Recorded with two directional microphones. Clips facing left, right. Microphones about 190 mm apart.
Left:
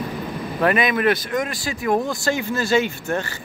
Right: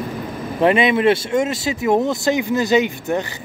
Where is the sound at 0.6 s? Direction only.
25° right (ahead or behind).